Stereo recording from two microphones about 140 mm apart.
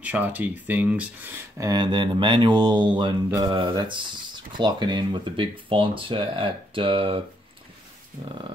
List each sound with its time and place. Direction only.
0.0 s speech: 10° right (ahead or behind)
1.7 s speech: 30° right (ahead or behind)
8.2 s a sound: 40° right (ahead or behind)